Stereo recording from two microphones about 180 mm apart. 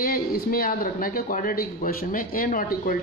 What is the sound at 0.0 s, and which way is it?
A woman's voice, 55° left (ahead or behind).